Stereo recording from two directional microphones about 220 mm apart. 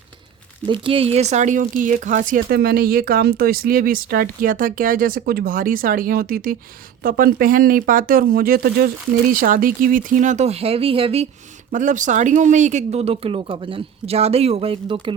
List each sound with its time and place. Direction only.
0.6 s speech: 25° right (ahead or behind)